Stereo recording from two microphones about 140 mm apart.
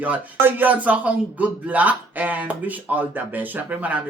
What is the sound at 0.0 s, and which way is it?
Speech, 15° right (ahead or behind).